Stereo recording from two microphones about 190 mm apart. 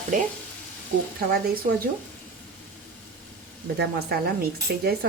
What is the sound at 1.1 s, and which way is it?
Speech, 50° right (ahead or behind).